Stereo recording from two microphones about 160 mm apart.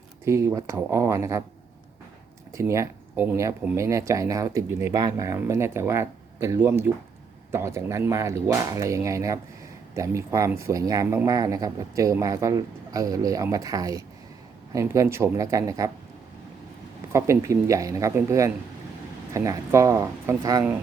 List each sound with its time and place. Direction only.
0.3 s speech: 20° right (ahead or behind)
2.5 s speech: 20° right (ahead or behind)
17.1 s speech: 20° right (ahead or behind)